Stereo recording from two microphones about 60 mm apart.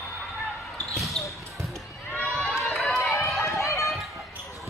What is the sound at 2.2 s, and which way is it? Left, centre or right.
Run, centre.